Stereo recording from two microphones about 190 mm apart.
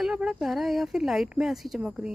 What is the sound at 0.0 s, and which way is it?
Speech, 5° right (ahead or behind).